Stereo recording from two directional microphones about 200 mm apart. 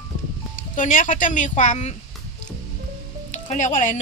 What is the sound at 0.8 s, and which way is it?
Speech, 40° left (ahead or behind).